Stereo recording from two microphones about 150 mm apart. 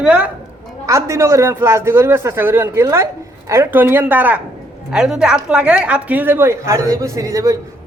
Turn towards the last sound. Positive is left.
turn(degrees=-20)  # may be behind; listen again after turning